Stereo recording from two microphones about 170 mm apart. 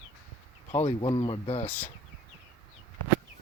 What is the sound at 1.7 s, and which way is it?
Speech, 10° left (ahead or behind).